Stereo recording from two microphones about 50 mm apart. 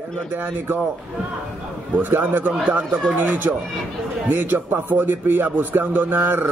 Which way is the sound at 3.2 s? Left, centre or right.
Right.